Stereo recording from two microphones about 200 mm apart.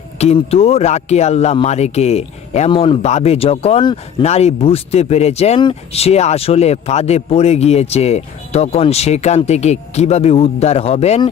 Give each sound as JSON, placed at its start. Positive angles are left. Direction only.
{"t": 0.2, "sound": "speech", "side_deg": 30}